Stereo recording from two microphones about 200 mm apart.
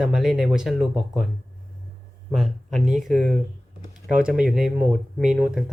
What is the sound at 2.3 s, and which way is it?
Speech, centre (ahead or behind).